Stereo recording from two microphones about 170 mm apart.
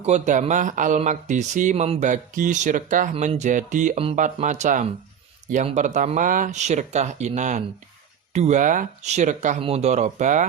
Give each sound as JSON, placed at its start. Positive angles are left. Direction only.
{"t": 0.0, "sound": "speech", "side_deg": -45}
{"t": 9.6, "sound": "speech", "side_deg": -35}